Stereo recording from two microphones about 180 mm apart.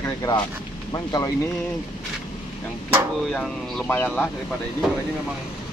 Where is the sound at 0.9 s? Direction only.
20° left (ahead or behind).